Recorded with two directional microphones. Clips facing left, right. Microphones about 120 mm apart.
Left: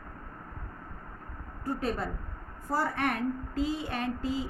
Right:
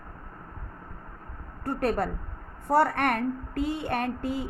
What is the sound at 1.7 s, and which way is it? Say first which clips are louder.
A woman's voice: right 5 dB; 65° right (ahead or behind).